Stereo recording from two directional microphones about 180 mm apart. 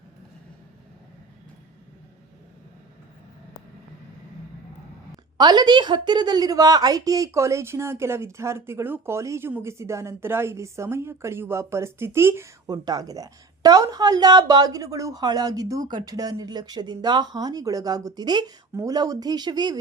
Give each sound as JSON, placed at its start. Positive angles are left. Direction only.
{"t": 5.4, "sound": "a woman's voice", "side_deg": -25}